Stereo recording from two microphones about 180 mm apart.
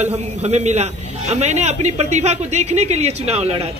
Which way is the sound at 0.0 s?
40° right (ahead or behind).